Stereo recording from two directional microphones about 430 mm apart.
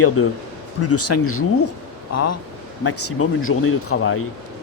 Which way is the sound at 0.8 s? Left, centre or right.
Left.